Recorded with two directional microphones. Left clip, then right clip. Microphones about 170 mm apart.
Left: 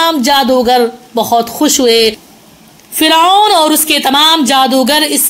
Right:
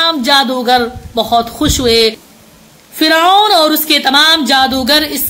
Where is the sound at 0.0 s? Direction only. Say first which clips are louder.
Left 1 dB; 35° left (ahead or behind).